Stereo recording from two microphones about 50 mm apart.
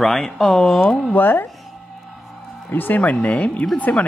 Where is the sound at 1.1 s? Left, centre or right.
Left.